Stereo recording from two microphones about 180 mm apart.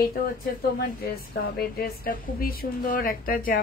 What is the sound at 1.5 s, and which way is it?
Speech, 55° left (ahead or behind).